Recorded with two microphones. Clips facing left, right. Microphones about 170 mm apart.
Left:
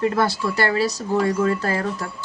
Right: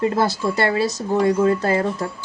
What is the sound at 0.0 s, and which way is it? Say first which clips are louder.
Speech: right 1 dB; 25° right (ahead or behind).